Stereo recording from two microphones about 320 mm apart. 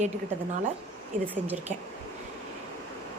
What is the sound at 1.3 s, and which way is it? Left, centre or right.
Speech, centre.